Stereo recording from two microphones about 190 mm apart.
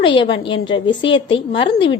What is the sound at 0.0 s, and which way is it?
A woman's voice, 25° left (ahead or behind).